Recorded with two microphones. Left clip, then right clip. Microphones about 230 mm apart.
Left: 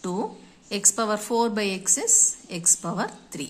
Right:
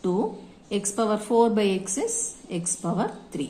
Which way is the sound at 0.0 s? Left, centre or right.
Left.